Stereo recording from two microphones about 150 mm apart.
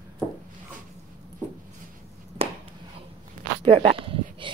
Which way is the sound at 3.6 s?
35° right (ahead or behind).